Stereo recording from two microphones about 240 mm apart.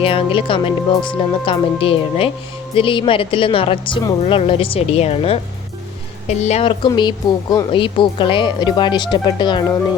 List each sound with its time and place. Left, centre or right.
0.0 s speech: left